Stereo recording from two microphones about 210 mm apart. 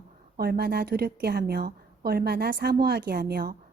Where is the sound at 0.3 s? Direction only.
45° right (ahead or behind).